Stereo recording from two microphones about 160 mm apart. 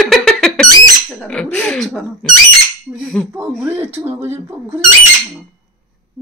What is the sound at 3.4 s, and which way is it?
Speech, 10° right (ahead or behind).